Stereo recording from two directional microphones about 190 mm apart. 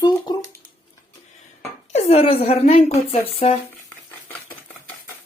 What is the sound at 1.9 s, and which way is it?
A woman's voice, 30° left (ahead or behind).